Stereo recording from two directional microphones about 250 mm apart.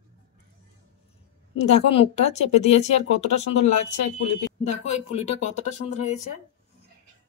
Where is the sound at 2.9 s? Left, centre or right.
Left.